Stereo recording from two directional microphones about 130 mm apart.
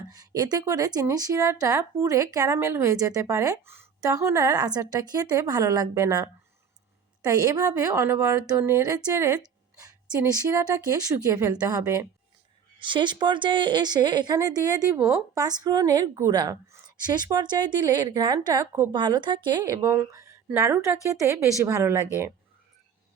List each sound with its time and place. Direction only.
0.1 s speech: 30° right (ahead or behind)
12.8 s speech: 40° right (ahead or behind); by 22.3 s 20° right (ahead or behind)